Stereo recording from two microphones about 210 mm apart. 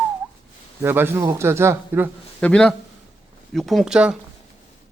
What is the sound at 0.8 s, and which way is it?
A man's voice, 10° right (ahead or behind).